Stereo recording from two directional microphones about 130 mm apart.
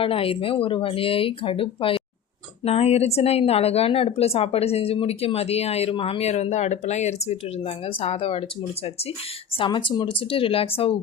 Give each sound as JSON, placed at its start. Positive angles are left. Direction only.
{"t": 0.0, "sound": "a woman's voice", "side_deg": 45}
{"t": 9.6, "sound": "a woman's voice", "side_deg": 40}